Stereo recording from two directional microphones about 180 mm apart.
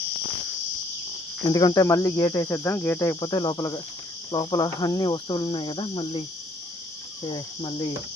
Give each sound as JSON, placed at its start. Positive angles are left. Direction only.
{"t": 1.5, "sound": "cricket", "side_deg": 20}
{"t": 7.3, "sound": "cricket", "side_deg": 25}